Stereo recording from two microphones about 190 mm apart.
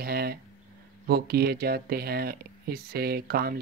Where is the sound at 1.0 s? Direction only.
55° right (ahead or behind).